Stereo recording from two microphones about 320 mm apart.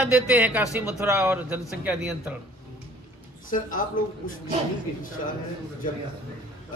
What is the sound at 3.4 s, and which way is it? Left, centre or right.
Speech, left.